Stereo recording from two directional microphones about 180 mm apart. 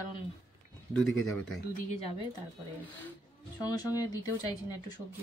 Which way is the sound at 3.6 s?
20° left (ahead or behind).